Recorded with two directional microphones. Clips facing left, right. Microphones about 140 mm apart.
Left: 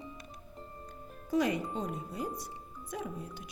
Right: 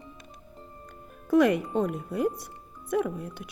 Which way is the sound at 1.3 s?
60° right (ahead or behind).